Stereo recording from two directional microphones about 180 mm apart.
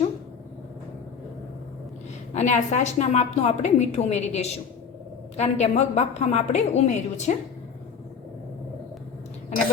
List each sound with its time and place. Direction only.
2.3 s a woman's voice: 40° left (ahead or behind)